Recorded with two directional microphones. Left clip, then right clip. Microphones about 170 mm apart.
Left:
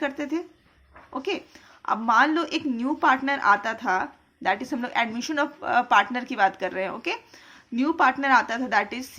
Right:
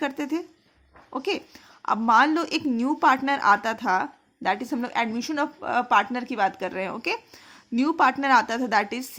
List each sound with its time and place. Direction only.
0.0 s a woman's voice: 60° right (ahead or behind)